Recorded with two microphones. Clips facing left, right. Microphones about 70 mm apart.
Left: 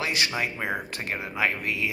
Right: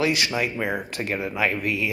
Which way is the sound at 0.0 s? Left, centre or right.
Left.